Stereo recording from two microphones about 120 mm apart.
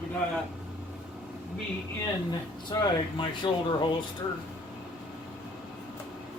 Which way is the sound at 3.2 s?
45° left (ahead or behind).